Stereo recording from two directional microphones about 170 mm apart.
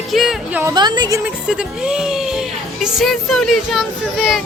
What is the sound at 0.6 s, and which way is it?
Music, 25° right (ahead or behind).